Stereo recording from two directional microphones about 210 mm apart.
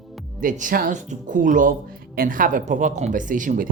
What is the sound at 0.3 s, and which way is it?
Speech, 40° right (ahead or behind).